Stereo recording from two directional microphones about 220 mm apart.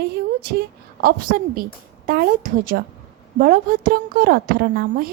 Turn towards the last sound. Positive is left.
turn(degrees=-40)  # may be behind; listen again after turning